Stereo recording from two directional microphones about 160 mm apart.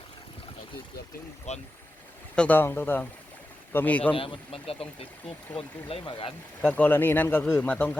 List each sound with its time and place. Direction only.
1.5 s speech: 45° left (ahead or behind)
2.3 s speech: 10° left (ahead or behind)
4.1 s speech: 35° left (ahead or behind)
6.6 s speech: 10° left (ahead or behind)